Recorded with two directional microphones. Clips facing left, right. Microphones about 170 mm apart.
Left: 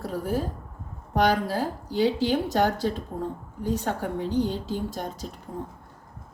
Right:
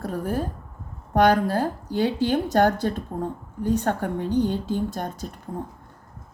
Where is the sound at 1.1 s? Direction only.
55° right (ahead or behind).